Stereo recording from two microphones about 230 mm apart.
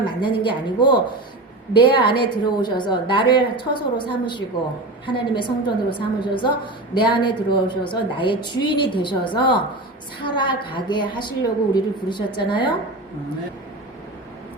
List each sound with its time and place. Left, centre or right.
0.0 s a woman's voice: left